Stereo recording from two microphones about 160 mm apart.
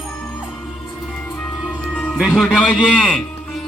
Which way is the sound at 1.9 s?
5° left (ahead or behind).